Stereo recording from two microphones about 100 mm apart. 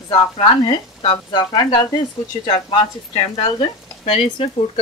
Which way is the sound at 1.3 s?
45° left (ahead or behind).